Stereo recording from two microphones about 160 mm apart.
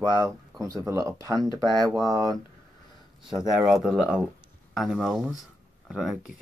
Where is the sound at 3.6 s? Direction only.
Centre (ahead or behind).